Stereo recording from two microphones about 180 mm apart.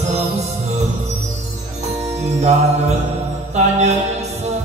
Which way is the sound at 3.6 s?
40° right (ahead or behind).